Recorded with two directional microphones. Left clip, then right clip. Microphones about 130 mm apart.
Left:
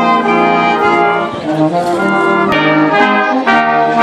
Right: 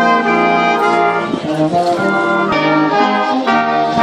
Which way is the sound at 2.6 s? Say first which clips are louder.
Left 2 dB; 10° left (ahead or behind).